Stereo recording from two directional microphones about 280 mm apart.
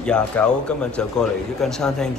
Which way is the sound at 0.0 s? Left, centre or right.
Centre.